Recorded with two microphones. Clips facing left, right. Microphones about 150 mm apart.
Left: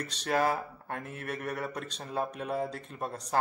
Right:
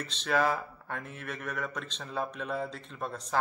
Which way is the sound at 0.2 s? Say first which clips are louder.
Even; 40° left (ahead or behind).